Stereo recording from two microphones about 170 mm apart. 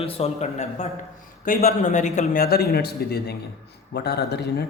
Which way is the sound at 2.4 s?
65° left (ahead or behind).